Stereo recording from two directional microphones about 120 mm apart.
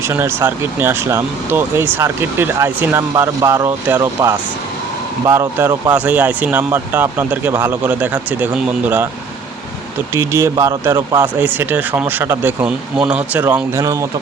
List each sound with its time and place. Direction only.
0.0 s speech: 20° right (ahead or behind)
5.2 s speech: 25° right (ahead or behind)
10.2 s speech: 25° right (ahead or behind)
13.8 s speech: 30° right (ahead or behind)